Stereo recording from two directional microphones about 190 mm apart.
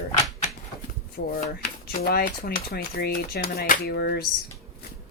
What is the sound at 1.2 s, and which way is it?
Speech, 60° left (ahead or behind).